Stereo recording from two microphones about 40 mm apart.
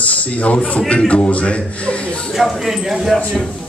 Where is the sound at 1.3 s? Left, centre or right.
Left.